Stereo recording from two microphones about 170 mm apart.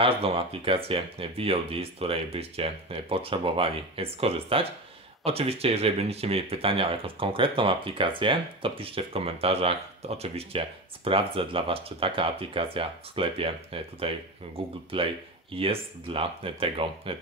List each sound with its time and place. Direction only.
0.0 s speech: 35° right (ahead or behind)